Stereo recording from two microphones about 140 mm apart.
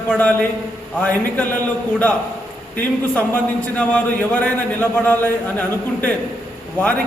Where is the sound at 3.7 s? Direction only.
10° left (ahead or behind).